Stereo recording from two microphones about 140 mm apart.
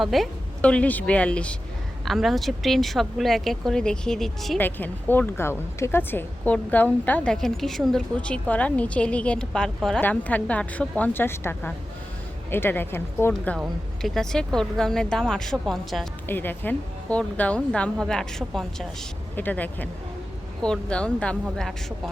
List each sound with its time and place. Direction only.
0.0 s a woman's voice: centre (ahead or behind)
4.6 s a woman's voice: 15° left (ahead or behind)
14.0 s speech: 5° left (ahead or behind)
16.2 s a woman's voice: 15° left (ahead or behind)